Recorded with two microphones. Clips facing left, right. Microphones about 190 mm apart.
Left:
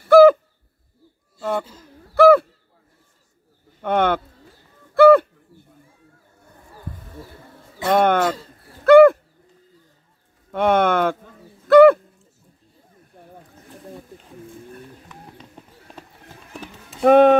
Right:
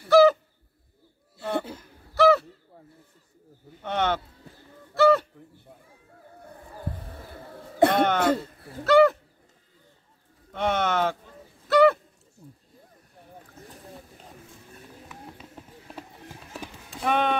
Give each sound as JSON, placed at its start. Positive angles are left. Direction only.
{"t": 0.1, "sound": "owl", "side_deg": 55}
{"t": 2.1, "sound": "a sound", "side_deg": 55}
{"t": 3.8, "sound": "speech", "side_deg": 55}
{"t": 4.9, "sound": "bird", "side_deg": 55}
{"t": 7.9, "sound": "a sound", "side_deg": 55}
{"t": 8.2, "sound": "a sound", "side_deg": -55}
{"t": 8.8, "sound": "bird", "side_deg": 55}
{"t": 10.5, "sound": "a sound", "side_deg": 55}
{"t": 11.6, "sound": "bird", "side_deg": 55}
{"t": 13.2, "sound": "boat", "side_deg": 55}
{"t": 15.6, "sound": "run", "side_deg": -5}
{"t": 16.5, "sound": "basketball bounce", "side_deg": -5}
{"t": 17.0, "sound": "basketball bounce", "side_deg": 45}